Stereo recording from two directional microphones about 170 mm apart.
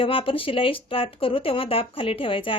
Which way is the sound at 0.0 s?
30° left (ahead or behind).